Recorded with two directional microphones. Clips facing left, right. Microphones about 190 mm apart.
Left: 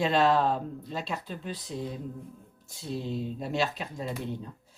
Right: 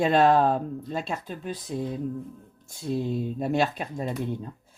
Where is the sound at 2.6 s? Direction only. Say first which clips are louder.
Right 6 dB; 50° right (ahead or behind).